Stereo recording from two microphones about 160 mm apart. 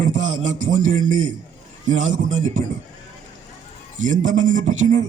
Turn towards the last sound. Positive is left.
turn(degrees=-50)  # may be behind; listen again after turning